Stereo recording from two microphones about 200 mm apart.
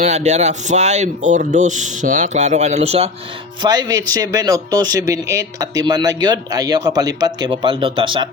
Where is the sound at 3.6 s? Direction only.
20° right (ahead or behind).